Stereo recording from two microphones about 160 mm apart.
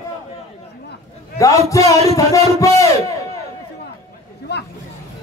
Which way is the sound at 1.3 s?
20° left (ahead or behind).